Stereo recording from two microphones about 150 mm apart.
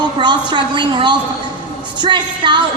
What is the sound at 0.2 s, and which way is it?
A woman's voice, 30° right (ahead or behind).